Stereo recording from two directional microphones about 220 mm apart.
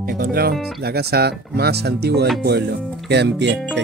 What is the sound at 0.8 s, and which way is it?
Speech, 45° right (ahead or behind).